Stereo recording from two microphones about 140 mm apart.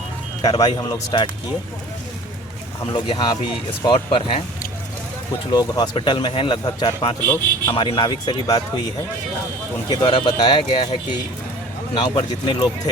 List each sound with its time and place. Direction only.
0.4 s speech: 25° left (ahead or behind)
2.9 s speech: 35° left (ahead or behind)
5.5 s speech: 30° left (ahead or behind)
9.9 s speech: 35° left (ahead or behind)
11.9 s speech: 35° left (ahead or behind)